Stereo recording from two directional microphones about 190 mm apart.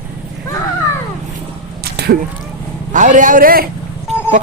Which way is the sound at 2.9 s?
40° right (ahead or behind).